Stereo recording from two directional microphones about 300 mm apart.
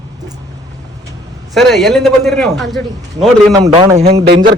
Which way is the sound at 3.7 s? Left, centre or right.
Centre.